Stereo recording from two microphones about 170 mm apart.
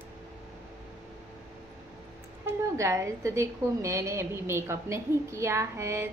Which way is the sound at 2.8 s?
15° right (ahead or behind).